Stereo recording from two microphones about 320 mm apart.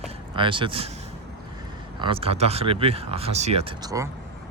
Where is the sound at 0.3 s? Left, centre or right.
Centre.